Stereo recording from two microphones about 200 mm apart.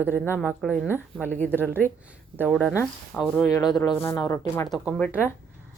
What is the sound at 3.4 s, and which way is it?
Speech, 20° left (ahead or behind).